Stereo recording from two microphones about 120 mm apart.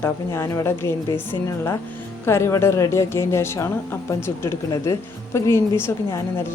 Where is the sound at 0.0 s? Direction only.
25° left (ahead or behind).